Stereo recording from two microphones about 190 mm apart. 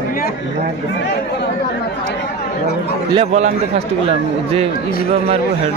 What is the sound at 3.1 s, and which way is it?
Speech, 35° right (ahead or behind).